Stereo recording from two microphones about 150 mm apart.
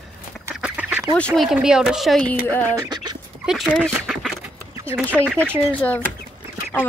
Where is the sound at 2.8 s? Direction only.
30° right (ahead or behind).